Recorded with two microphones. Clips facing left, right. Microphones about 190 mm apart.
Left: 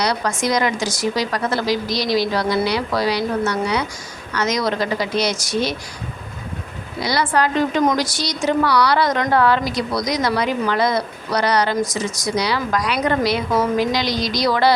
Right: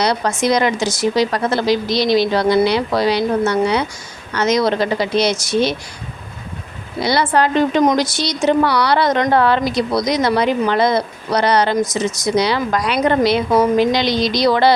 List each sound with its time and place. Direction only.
0.0 s a woman's voice: 25° right (ahead or behind)
7.0 s a woman's voice: 25° right (ahead or behind)